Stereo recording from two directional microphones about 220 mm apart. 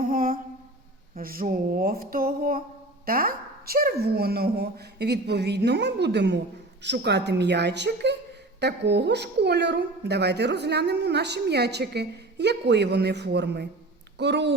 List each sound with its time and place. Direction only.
0.1 s mantra: 40° right (ahead or behind)
1.1 s a sound: 40° right (ahead or behind)
3.1 s a woman's voice: 40° right (ahead or behind)